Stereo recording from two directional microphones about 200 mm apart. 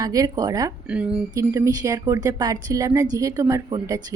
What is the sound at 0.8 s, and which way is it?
A woman's voice, 5° right (ahead or behind).